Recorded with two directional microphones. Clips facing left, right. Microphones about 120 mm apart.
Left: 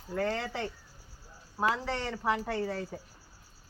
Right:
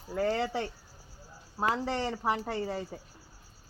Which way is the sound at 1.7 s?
25° right (ahead or behind).